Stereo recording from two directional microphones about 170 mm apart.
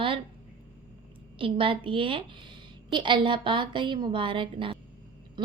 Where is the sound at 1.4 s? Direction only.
30° right (ahead or behind).